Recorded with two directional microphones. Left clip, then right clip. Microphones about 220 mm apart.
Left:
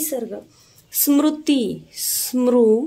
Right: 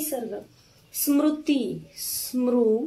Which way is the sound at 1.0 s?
50° left (ahead or behind).